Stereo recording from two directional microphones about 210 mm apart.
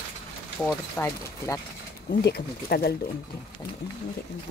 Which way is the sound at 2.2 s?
50° left (ahead or behind).